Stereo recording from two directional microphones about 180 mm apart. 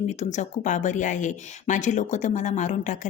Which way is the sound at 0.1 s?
40° left (ahead or behind).